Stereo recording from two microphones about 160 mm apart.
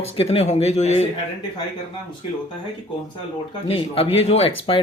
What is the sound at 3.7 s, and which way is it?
Speech, 35° left (ahead or behind).